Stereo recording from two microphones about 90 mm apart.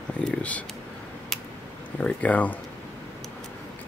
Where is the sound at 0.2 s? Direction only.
15° left (ahead or behind).